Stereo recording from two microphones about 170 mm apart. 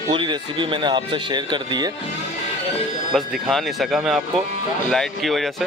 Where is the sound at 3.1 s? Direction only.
Centre (ahead or behind).